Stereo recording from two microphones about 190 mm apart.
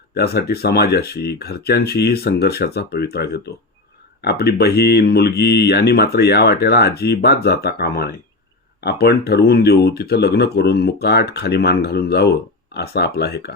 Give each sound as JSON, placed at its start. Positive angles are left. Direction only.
{"t": 0.1, "sound": "speech", "side_deg": 55}